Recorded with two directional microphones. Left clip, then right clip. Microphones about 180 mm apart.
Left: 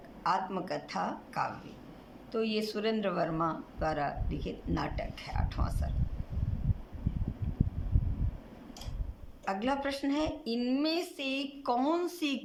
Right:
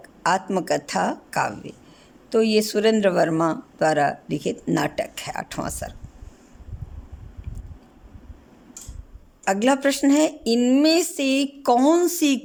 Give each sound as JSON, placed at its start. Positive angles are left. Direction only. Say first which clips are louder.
{"t": 0.2, "sound": "speech", "louder": "right 9 dB", "side_deg": -60}
{"t": 9.4, "sound": "speech", "louder": "right 13 dB", "side_deg": -60}